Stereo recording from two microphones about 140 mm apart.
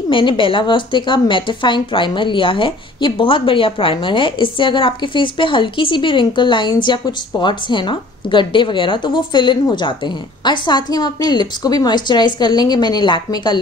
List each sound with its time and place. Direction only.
0.1 s a woman's voice: 35° left (ahead or behind)